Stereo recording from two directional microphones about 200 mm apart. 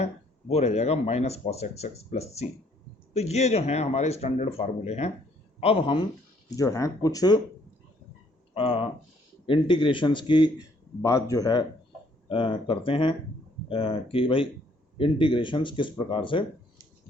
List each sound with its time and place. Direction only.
0.0 s a man's voice: 30° left (ahead or behind)
8.5 s a man's voice: 30° left (ahead or behind)